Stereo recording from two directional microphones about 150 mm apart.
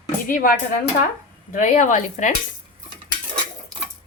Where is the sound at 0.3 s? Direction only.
65° left (ahead or behind).